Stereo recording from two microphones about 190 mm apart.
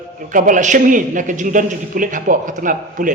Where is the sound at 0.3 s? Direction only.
45° right (ahead or behind).